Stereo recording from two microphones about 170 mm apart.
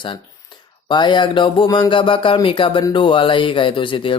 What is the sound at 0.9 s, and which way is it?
Speech, 25° left (ahead or behind).